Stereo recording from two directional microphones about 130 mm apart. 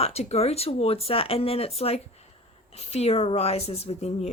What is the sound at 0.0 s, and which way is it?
Speech, 55° left (ahead or behind).